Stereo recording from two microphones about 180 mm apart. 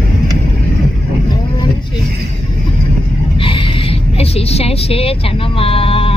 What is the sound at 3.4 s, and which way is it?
Vehicle, 30° left (ahead or behind).